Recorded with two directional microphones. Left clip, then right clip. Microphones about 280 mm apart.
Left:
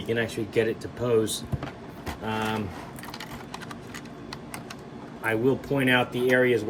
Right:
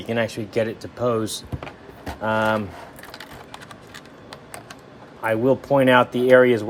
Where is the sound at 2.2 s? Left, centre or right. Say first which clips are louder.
Right 9 dB; right.